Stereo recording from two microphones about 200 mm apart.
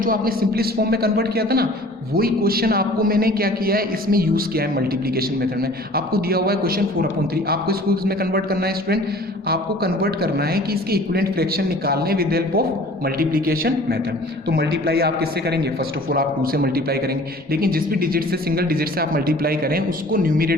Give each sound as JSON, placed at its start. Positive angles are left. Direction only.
{"t": 0.0, "sound": "a man's voice", "side_deg": -45}